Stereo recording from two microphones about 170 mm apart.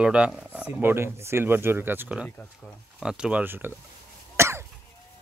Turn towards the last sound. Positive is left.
turn(degrees=-15)  # may be behind; listen again after turning